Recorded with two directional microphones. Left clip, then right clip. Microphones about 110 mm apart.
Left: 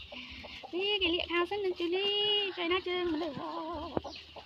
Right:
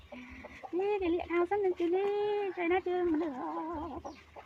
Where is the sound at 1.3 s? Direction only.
15° right (ahead or behind).